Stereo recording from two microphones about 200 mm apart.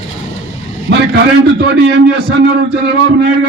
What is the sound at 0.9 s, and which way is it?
A man's voice, 55° right (ahead or behind).